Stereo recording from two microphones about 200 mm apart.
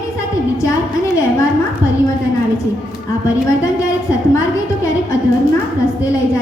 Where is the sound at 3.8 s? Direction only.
15° left (ahead or behind).